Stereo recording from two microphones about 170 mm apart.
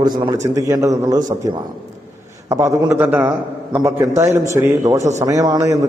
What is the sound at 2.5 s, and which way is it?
A man's voice, 20° right (ahead or behind).